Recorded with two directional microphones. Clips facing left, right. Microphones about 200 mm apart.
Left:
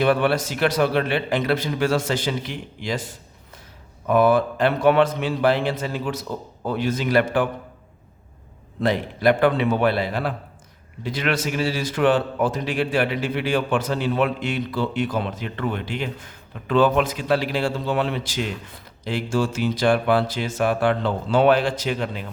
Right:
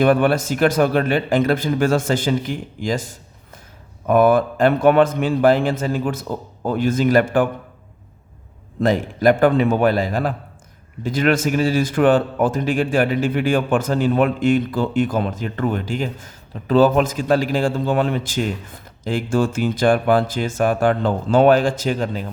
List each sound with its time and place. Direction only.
0.0 s a man's voice: 50° right (ahead or behind)
8.8 s a man's voice: 45° right (ahead or behind)